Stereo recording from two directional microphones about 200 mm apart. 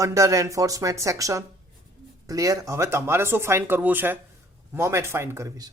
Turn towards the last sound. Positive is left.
turn(degrees=-15)  # may be behind; listen again after turning